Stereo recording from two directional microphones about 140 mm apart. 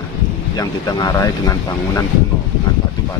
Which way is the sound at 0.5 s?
25° left (ahead or behind).